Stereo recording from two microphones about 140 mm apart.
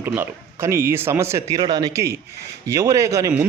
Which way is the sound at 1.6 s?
30° right (ahead or behind).